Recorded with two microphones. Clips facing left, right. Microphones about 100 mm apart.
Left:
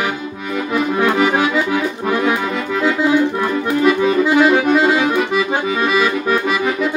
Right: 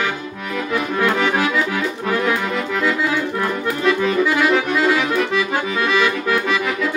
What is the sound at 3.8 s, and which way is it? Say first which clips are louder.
Accordion: left 3 dB; 15° left (ahead or behind).